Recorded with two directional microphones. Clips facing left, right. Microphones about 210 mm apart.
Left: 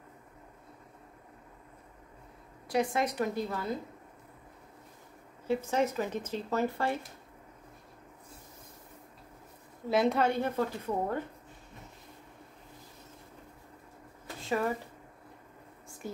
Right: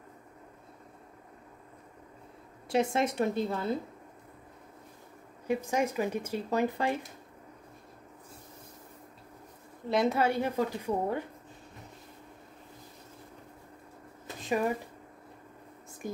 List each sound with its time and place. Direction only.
2.7 s a woman's voice: 25° right (ahead or behind)
5.5 s speech: 15° right (ahead or behind)
9.8 s speech: centre (ahead or behind)
14.2 s a sound: 15° right (ahead or behind)